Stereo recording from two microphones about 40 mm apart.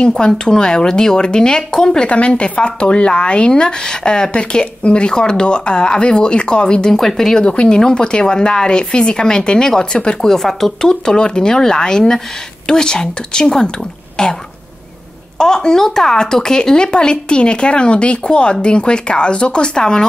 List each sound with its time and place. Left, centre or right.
0.0 s speech: centre
2.0 s speech: left
6.9 s speech: centre
7.4 s speech: left
10.2 s speech: centre
10.9 s speech: left